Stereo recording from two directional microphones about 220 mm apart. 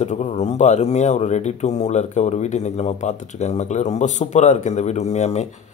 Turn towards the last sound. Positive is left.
turn(degrees=30)  # may be behind; listen again after turning